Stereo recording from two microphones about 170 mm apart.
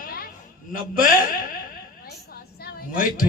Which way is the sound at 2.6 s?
55° left (ahead or behind).